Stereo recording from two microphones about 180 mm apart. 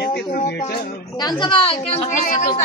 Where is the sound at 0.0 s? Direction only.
65° left (ahead or behind).